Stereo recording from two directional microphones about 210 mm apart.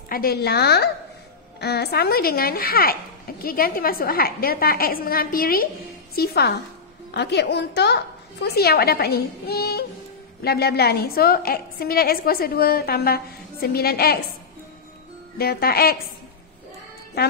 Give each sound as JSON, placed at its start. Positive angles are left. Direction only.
{"t": 0.1, "sound": "a woman's voice", "side_deg": 45}
{"t": 15.3, "sound": "a woman's voice", "side_deg": 45}